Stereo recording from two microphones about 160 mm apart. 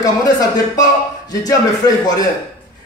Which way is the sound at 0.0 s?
20° left (ahead or behind).